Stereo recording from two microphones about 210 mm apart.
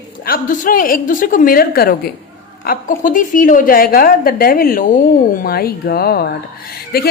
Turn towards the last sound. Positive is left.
turn(degrees=45)  # may be behind; listen again after turning